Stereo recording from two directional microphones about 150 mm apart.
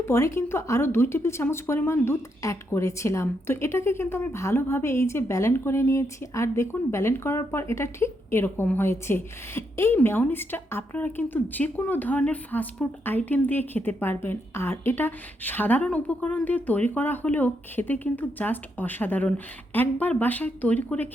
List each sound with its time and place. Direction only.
0.0 s a woman's voice: 15° left (ahead or behind)